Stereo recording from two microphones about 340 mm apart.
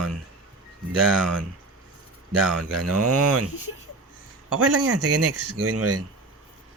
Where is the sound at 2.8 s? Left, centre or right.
Right.